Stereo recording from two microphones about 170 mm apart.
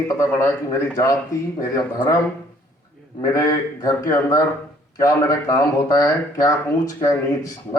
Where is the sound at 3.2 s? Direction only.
20° left (ahead or behind).